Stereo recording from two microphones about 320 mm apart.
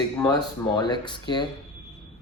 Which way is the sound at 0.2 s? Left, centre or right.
Centre.